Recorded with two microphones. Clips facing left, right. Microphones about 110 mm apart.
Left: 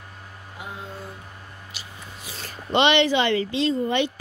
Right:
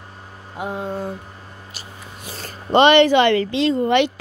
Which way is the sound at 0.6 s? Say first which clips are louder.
Right 11 dB; 55° right (ahead or behind).